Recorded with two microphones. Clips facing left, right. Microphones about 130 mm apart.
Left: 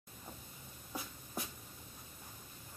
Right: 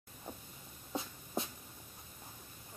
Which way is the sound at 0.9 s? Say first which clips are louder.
Right 5 dB; 25° right (ahead or behind).